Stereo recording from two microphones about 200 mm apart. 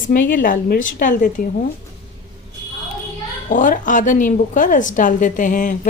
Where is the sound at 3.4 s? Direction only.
40° left (ahead or behind).